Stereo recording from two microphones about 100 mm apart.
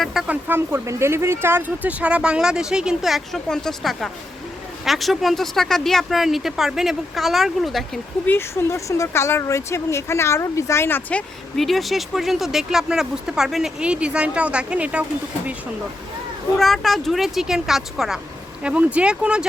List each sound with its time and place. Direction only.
0.0 s speech: 5° right (ahead or behind)
0.3 s speech: 20° right (ahead or behind); by 7.9 s centre (ahead or behind)
8.3 s speech: 25° left (ahead or behind)
11.5 s speech: centre (ahead or behind)
16.6 s speech: centre (ahead or behind)
18.6 s speech: 15° right (ahead or behind)